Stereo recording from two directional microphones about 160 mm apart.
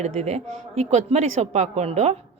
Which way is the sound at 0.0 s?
45° right (ahead or behind).